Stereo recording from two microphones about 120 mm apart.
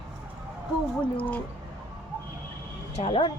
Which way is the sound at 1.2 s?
15° left (ahead or behind).